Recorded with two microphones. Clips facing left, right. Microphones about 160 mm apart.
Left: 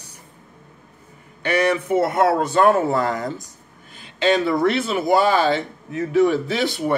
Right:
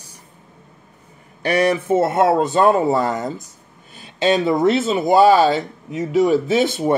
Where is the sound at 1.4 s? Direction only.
30° right (ahead or behind).